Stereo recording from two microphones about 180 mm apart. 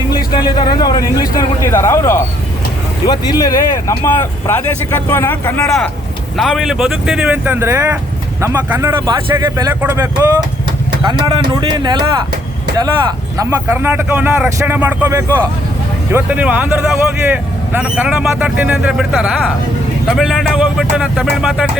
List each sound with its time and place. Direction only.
0.3 s a man's voice: 25° left (ahead or behind); by 10.1 s 15° right (ahead or behind)
11.0 s speech: 25° right (ahead or behind); by 21.7 s 5° right (ahead or behind)